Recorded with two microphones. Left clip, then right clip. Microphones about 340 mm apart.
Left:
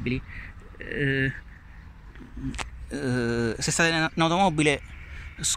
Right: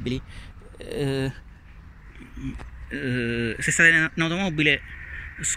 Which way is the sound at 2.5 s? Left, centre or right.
Left.